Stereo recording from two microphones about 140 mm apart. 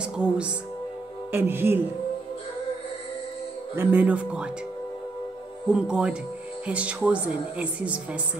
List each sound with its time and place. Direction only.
0.0 s a woman's voice: 5° right (ahead or behind)
3.7 s a woman's voice: 10° right (ahead or behind)
5.7 s a woman's voice: 5° right (ahead or behind)